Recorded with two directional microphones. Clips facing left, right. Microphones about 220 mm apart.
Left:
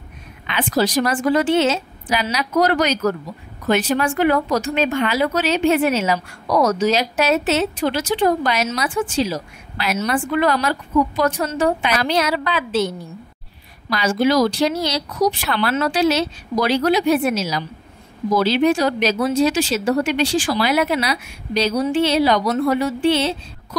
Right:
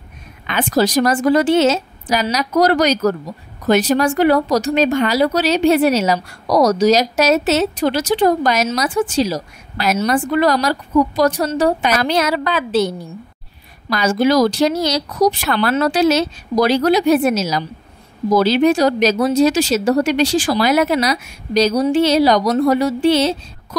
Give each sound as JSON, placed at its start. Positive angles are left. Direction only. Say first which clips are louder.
{"t": 0.5, "sound": "speech", "louder": "right 3 dB", "side_deg": -45}